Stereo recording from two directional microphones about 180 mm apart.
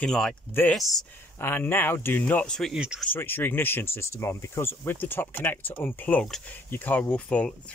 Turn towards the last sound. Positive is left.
turn(degrees=5)  # may be behind; listen again after turning